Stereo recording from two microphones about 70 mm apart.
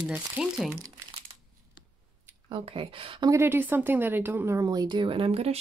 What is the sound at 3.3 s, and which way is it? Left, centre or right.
A woman's voice, right.